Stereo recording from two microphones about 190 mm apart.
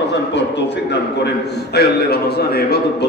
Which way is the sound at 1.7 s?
55° left (ahead or behind).